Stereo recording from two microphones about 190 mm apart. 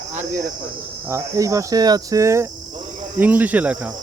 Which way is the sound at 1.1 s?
15° right (ahead or behind).